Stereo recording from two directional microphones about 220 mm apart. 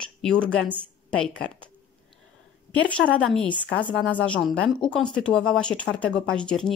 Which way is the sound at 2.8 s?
5° left (ahead or behind).